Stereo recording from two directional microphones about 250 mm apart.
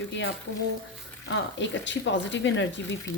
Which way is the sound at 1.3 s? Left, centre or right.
Left.